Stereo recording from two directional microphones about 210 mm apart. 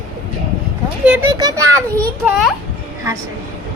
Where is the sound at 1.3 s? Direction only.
20° right (ahead or behind).